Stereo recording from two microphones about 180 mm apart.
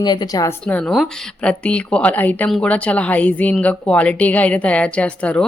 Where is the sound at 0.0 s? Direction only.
25° left (ahead or behind).